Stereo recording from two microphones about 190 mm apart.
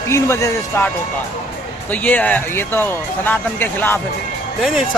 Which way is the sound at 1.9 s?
10° left (ahead or behind).